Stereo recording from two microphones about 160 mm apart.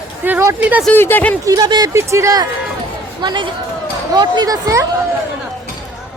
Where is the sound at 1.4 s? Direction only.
20° right (ahead or behind).